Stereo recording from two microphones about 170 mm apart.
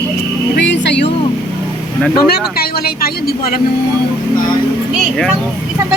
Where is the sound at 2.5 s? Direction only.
65° left (ahead or behind).